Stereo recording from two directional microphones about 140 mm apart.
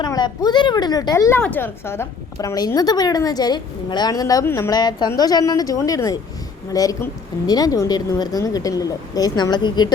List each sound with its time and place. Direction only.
0.0 s a woman's voice: 30° left (ahead or behind)
1.4 s a woman's voice: 15° left (ahead or behind)
4.7 s a woman's voice: 30° left (ahead or behind)